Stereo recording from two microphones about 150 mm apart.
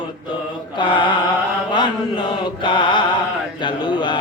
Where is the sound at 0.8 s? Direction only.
30° left (ahead or behind).